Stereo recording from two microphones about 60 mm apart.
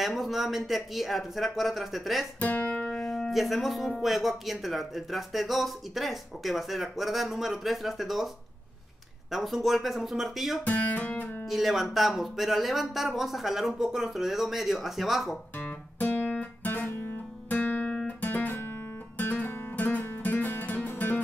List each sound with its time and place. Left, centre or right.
0.0 s speech: centre
2.4 s music: left
3.0 s speech: centre
9.3 s speech: centre
10.6 s music: left
11.4 s speech: centre
15.5 s music: left
17.5 s guitar: left
17.8 s guitar: centre
18.2 s guitar: left
20.2 s music: left